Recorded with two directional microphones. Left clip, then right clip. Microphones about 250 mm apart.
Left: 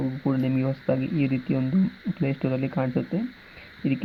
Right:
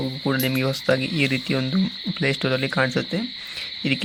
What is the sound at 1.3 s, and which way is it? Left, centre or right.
Speech, right.